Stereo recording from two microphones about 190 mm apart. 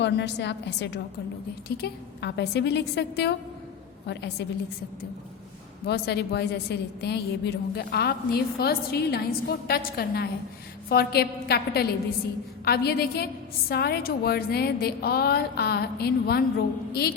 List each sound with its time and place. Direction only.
0.0 s a woman's voice: 65° left (ahead or behind)
5.8 s a woman's voice: 60° left (ahead or behind)